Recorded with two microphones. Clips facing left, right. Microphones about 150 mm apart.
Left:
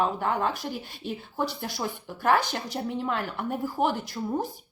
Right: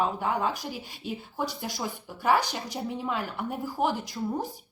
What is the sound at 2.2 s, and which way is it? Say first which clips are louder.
Speech: left 1 dB; 5° right (ahead or behind).